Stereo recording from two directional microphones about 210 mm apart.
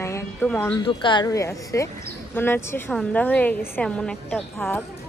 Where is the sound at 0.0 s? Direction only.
15° left (ahead or behind).